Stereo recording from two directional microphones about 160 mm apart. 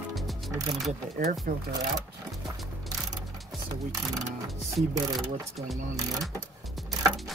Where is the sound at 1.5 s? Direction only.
65° right (ahead or behind).